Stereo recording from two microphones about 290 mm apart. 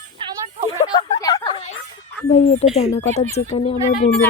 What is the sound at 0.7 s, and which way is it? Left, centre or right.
A woman's voice, centre.